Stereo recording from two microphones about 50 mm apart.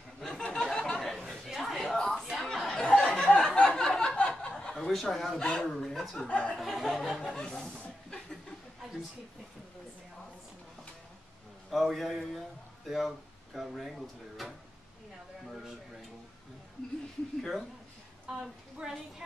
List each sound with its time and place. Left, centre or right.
0.2 s a sound: centre
0.7 s chatter: centre
2.0 s a sound: centre; by 4.7 s left
4.7 s speech: centre
6.2 s speech: left
6.6 s music: centre
7.3 s speech: centre
11.7 s a man's voice: centre
17.4 s music: centre
18.4 s a woman's voice: centre